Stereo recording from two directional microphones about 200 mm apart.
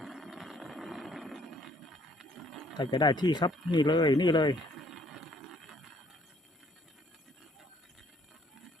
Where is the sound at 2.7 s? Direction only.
20° left (ahead or behind).